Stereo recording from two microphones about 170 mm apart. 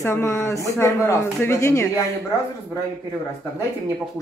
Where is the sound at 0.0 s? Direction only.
15° left (ahead or behind).